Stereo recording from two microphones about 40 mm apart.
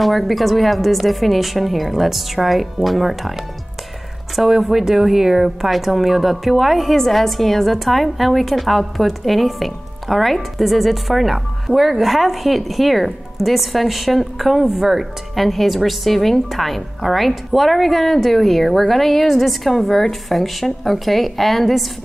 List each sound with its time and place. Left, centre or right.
0.0 s a woman's voice: centre
4.4 s a woman's voice: centre
15.3 s a woman's voice: centre